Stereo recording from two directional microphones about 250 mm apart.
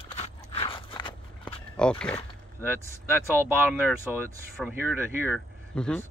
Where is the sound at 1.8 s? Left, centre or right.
Centre.